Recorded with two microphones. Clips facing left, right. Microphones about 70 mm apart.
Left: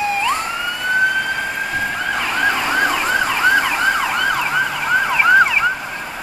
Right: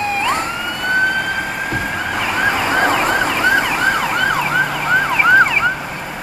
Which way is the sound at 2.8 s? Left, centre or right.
Right.